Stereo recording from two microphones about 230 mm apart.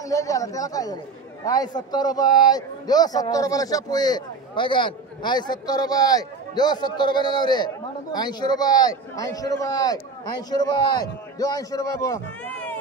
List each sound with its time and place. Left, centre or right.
0.0 s a man's voice: centre